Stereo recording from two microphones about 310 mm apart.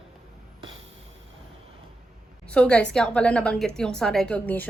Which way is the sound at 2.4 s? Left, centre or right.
Centre.